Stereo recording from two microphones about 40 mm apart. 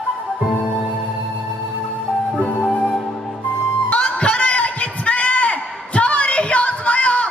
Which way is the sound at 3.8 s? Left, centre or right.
Left.